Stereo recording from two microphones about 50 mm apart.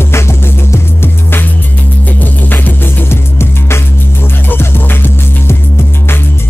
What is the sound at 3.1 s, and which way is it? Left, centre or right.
Music, left.